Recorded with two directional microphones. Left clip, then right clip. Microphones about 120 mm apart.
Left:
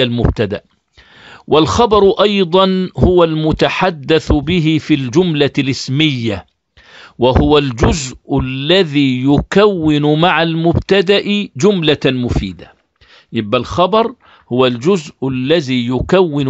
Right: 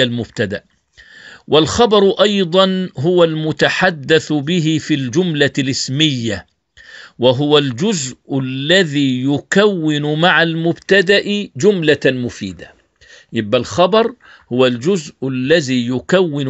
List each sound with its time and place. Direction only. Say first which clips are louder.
0.1 s speech: left 3 dB; 50° left (ahead or behind)
2.7 s speech: left 3 dB; 60° left (ahead or behind)
10.2 s speech: right 4 dB; 45° left (ahead or behind)
10.6 s speech: left 1 dB; 65° left (ahead or behind)
13.3 s speech: even; 35° left (ahead or behind)
14.5 s speech: left 2 dB; 45° left (ahead or behind)